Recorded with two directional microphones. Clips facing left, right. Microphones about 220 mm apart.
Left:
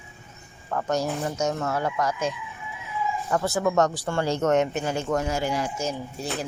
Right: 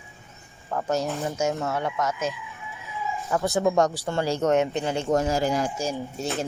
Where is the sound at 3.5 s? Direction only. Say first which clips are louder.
Right 2 dB; 15° right (ahead or behind).